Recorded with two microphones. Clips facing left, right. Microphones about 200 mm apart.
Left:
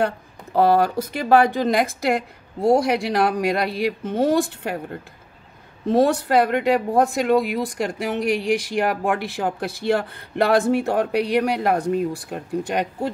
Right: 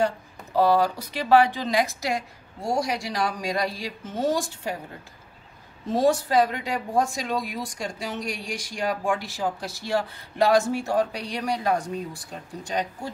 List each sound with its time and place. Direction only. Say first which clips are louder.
0.0 s speech: left 2 dB; 60° left (ahead or behind)
5.9 s speech: left 4 dB; 60° left (ahead or behind)